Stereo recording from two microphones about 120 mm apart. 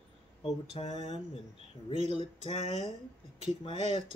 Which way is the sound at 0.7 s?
55° left (ahead or behind).